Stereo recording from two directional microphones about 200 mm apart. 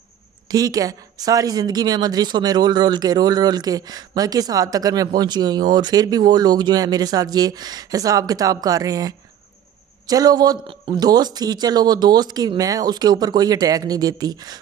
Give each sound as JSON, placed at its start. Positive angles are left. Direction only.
{"t": 0.5, "sound": "speech", "side_deg": -20}